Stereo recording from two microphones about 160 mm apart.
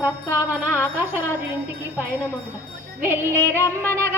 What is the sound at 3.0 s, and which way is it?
Wind chime, 15° right (ahead or behind).